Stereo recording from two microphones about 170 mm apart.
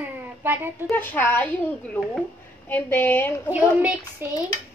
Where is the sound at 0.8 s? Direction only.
10° left (ahead or behind).